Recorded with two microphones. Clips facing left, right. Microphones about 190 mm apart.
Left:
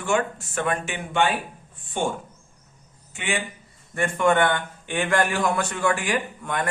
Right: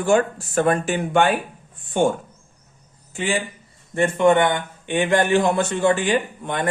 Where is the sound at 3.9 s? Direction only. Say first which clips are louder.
Right 4 dB; 25° right (ahead or behind).